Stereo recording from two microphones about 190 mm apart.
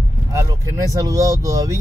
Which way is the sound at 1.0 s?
20° right (ahead or behind).